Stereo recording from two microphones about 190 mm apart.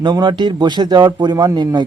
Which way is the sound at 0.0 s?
25° right (ahead or behind).